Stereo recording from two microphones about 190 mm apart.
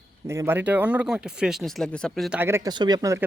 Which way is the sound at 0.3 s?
15° right (ahead or behind).